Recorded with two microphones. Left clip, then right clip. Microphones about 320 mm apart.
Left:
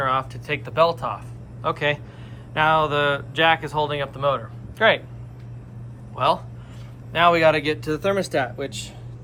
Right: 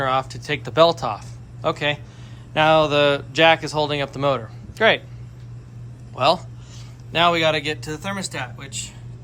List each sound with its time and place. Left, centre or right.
0.0 s speech: centre
6.1 s speech: centre